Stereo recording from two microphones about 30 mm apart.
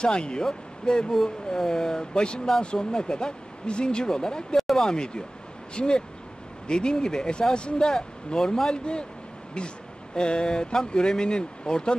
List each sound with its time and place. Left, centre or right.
0.0 s speech: left
1.1 s speech: centre; by 7.9 s left
8.4 s a man's voice: centre
8.7 s speech: left